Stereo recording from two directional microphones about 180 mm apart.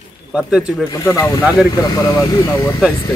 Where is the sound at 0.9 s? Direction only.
20° left (ahead or behind).